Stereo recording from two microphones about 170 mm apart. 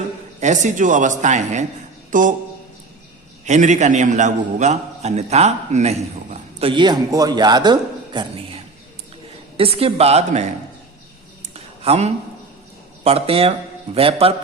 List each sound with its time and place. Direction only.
0.3 s a man's voice: 45° right (ahead or behind)
3.4 s a man's voice: 45° right (ahead or behind)
11.5 s a sound: 40° right (ahead or behind)
13.1 s a man's voice: 35° right (ahead or behind)